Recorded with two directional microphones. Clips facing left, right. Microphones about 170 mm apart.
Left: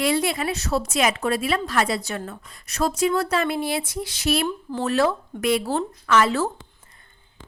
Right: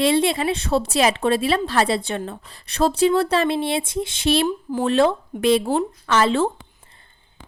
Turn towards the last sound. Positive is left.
turn(degrees=-25)  # may be behind; listen again after turning